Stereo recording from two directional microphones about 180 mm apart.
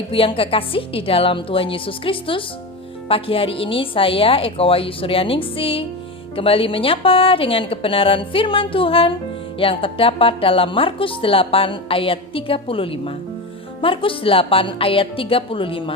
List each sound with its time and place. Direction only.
0.1 s a woman's voice: 30° left (ahead or behind)